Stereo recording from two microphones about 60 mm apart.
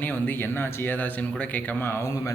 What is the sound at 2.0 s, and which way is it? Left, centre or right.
Speech, left.